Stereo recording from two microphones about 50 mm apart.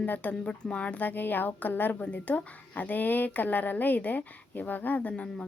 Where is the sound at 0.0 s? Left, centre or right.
Left.